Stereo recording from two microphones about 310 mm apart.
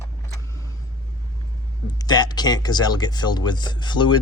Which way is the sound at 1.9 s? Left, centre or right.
Centre.